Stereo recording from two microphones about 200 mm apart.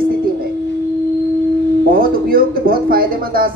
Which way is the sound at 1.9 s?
45° right (ahead or behind).